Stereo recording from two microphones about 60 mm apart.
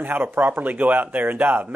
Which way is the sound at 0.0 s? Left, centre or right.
Right.